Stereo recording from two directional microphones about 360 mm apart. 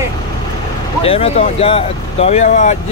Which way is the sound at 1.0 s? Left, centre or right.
Centre.